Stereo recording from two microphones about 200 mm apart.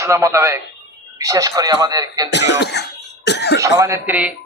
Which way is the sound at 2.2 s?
60° left (ahead or behind).